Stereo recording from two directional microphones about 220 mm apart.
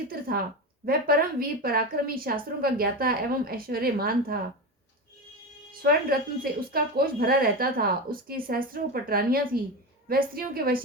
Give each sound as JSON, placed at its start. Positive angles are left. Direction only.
{"t": 0.1, "sound": "a woman's voice", "side_deg": -40}
{"t": 5.8, "sound": "a woman's voice", "side_deg": -40}